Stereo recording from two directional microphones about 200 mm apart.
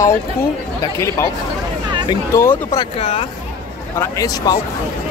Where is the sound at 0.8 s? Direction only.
15° left (ahead or behind).